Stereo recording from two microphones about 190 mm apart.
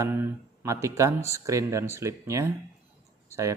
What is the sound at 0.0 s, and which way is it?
Speech, 10° right (ahead or behind).